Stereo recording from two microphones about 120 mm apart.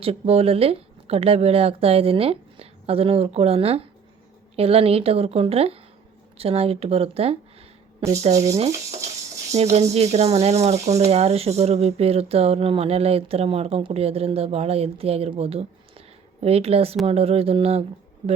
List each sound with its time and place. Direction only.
0.0 s speech: 55° right (ahead or behind)
8.1 s speech: 65° right (ahead or behind)